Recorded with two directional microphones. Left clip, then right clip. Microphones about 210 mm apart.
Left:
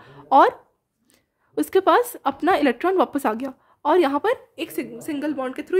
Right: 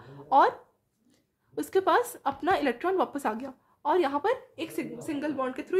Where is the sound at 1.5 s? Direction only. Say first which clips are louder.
Left 7 dB; 40° left (ahead or behind).